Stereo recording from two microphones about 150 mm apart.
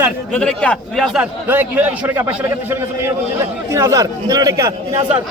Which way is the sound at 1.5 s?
10° right (ahead or behind).